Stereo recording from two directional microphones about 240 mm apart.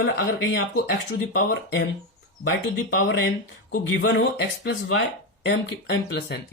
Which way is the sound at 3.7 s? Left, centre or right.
Left.